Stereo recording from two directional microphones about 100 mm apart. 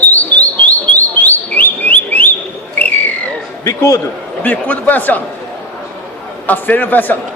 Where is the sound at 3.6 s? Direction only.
30° left (ahead or behind).